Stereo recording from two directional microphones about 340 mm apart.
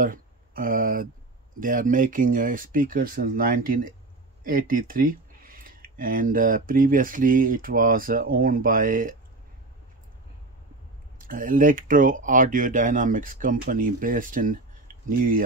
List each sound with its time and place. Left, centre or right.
0.0 s speech: right
11.1 s speech: right